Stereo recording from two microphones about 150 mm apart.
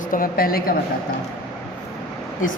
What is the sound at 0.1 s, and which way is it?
Speech, 75° left (ahead or behind).